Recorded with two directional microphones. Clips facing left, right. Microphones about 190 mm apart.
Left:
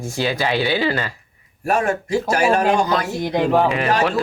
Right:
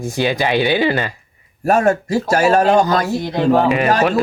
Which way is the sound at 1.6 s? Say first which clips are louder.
Right 5 dB; 40° right (ahead or behind).